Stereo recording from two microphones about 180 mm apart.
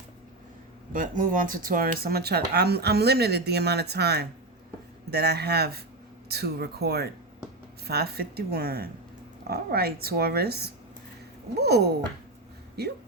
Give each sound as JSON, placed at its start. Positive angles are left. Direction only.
{"t": 0.9, "sound": "speech", "side_deg": -45}